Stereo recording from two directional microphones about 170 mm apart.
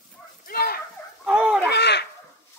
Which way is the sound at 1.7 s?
75° left (ahead or behind).